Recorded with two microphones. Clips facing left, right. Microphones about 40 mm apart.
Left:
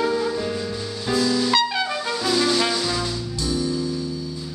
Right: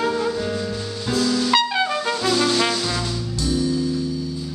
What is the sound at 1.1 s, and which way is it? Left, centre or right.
Music, centre.